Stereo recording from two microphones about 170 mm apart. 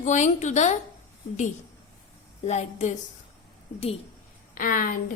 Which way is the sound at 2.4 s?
40° left (ahead or behind).